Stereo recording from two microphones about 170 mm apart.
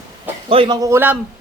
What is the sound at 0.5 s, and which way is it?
Speech, 30° right (ahead or behind).